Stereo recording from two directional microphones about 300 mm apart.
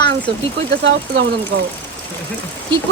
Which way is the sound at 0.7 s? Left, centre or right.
Right.